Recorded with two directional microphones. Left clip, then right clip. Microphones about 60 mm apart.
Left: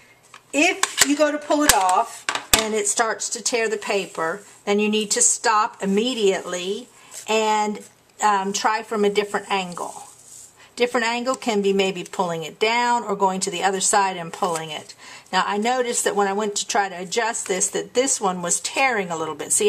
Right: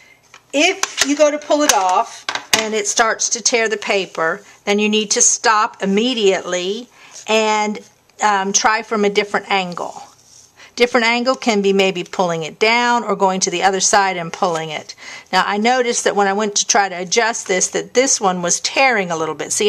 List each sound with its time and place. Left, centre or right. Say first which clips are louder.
1.4 s speech: right 5 dB; right
1.7 s speech: right 1 dB; right
2.2 s a sound: right 3 dB; centre
2.8 s speech: right 6 dB; right
9.8 s speech: right 5 dB; right
10.7 s speech: right 7 dB; right